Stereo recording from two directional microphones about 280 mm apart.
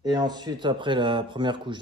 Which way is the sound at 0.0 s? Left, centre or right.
Centre.